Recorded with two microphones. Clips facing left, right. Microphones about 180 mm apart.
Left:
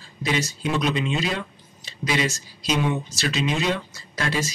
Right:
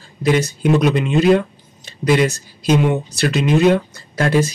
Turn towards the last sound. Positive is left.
turn(degrees=-50)  # may be behind; listen again after turning